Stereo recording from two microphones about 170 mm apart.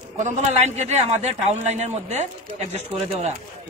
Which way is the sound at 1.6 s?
45° right (ahead or behind).